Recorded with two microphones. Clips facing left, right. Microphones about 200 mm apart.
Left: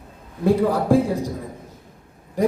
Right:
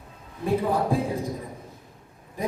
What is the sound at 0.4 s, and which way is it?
Speech, 80° left.